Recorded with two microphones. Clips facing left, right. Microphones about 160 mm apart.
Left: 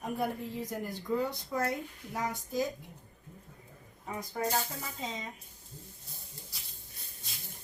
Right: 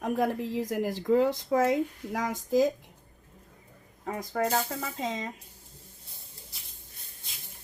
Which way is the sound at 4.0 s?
85° right.